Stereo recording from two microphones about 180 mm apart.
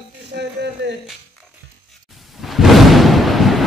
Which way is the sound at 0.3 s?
70° right (ahead or behind).